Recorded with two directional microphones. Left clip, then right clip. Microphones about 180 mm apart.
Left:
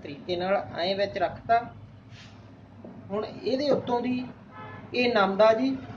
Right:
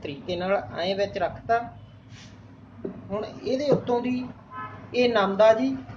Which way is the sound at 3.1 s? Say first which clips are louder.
Even; 10° right (ahead or behind).